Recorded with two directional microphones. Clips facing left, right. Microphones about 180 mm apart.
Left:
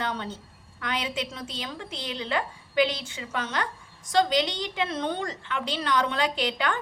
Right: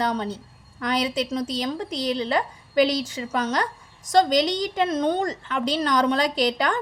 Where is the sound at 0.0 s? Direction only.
40° right (ahead or behind).